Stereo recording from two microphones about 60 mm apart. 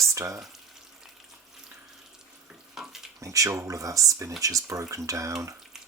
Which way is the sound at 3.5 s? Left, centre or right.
Right.